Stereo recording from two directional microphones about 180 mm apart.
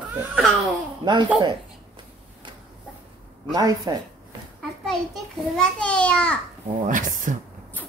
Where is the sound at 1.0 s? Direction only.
25° right (ahead or behind).